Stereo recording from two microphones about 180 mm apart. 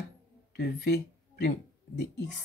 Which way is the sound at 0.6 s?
60° left (ahead or behind).